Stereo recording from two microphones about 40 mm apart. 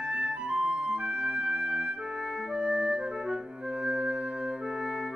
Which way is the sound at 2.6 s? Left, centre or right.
Right.